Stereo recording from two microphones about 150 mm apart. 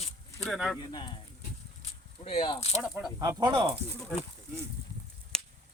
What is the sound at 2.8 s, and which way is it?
Speech, 5° right (ahead or behind).